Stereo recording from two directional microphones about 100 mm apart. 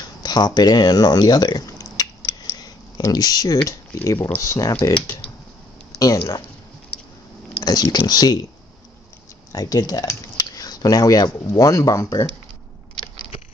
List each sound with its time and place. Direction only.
0.2 s a sound: 45° left (ahead or behind)
3.6 s speech: 30° left (ahead or behind)
5.9 s speech: 30° left (ahead or behind)
7.6 s speech: 40° left (ahead or behind)
9.5 s speech: 40° left (ahead or behind)